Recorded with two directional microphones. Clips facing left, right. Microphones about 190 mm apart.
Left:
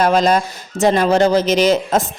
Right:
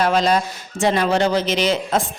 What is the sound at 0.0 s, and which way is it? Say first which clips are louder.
A woman's voice: left 3 dB; 45° left (ahead or behind).